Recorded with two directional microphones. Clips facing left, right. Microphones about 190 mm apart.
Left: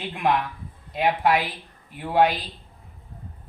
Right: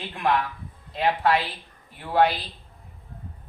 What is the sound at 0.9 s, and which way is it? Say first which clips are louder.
Speech: left 1 dB; 15° left (ahead or behind).